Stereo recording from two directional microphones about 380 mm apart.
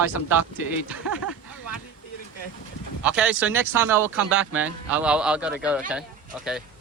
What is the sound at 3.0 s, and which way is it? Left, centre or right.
Speech, centre.